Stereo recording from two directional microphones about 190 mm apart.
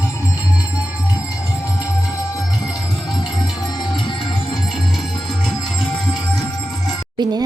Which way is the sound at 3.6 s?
20° left (ahead or behind).